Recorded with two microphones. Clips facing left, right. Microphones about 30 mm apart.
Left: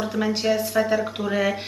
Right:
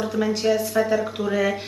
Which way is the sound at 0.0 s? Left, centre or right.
Centre.